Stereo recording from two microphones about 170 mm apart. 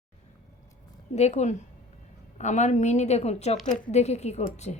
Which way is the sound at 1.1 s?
40° left (ahead or behind).